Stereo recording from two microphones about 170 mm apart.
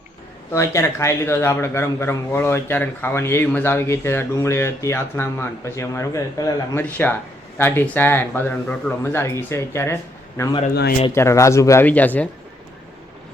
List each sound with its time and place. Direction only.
0.5 s speech: 15° left (ahead or behind)